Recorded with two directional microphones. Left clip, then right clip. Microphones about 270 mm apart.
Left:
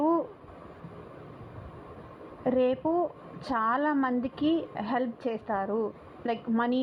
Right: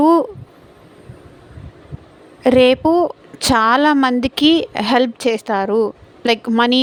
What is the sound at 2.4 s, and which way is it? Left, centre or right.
A woman's voice, right.